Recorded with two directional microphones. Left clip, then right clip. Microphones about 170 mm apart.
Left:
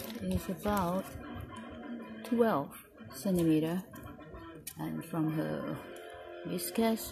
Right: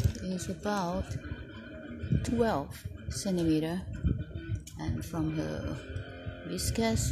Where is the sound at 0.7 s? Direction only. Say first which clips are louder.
Even; 5° right (ahead or behind).